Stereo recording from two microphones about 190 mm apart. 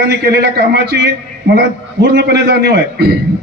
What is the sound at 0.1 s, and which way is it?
Speech, 60° right (ahead or behind).